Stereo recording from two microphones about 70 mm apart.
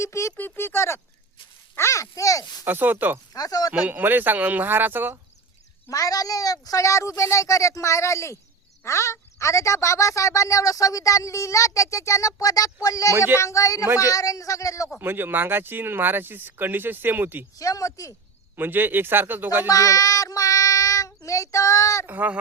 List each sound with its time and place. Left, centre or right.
0.0 s speech: left
0.3 s speech: left
2.6 s speech: right
3.3 s speech: left
3.7 s speech: right
5.9 s speech: left
14.9 s speech: right
17.6 s speech: left
18.5 s speech: right
19.6 s child singing: left
22.0 s speech: right